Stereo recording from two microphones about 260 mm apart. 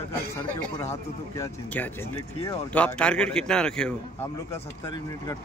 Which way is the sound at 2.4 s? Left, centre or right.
Centre.